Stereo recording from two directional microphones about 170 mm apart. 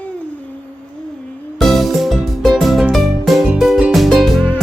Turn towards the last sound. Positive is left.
turn(degrees=0)  # may be behind; listen again after turning